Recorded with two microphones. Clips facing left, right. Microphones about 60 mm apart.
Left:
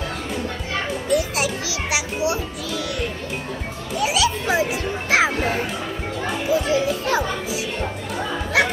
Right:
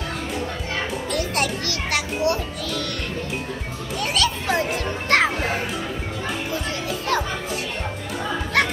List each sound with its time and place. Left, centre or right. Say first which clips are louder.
1.1 s music: left 4 dB; centre
3.9 s speech: left 3 dB; centre
6.5 s a child's voice: left 7 dB; centre